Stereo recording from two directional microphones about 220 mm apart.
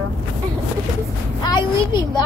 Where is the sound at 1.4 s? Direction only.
20° left (ahead or behind).